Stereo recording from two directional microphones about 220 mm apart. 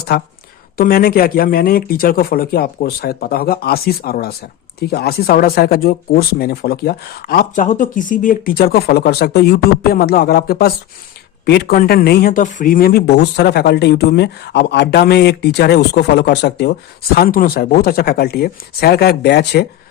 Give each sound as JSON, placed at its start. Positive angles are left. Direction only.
{"t": 0.8, "sound": "speech", "side_deg": 40}